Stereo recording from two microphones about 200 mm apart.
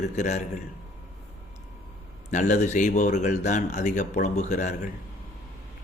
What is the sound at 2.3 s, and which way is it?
A man's voice, 35° left (ahead or behind).